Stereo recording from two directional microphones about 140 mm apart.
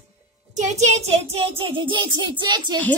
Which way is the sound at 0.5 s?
55° right (ahead or behind).